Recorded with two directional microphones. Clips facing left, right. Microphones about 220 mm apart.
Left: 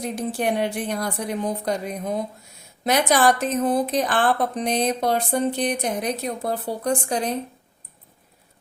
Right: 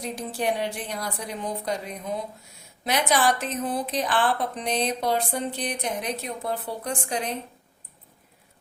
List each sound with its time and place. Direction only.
0.2 s speech: 55° left (ahead or behind); by 7.3 s 40° left (ahead or behind)